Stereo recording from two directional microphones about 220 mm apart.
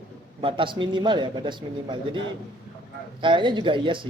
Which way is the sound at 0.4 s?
25° right (ahead or behind).